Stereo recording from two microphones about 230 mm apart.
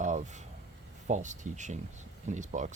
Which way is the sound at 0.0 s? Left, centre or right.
Right.